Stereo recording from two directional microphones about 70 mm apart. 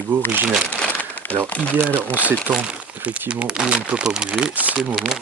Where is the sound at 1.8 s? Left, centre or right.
Right.